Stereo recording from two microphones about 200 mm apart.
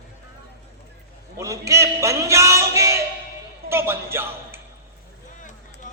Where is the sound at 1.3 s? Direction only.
15° right (ahead or behind).